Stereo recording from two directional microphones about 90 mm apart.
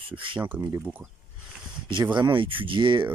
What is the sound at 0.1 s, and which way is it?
Speech, 75° right (ahead or behind).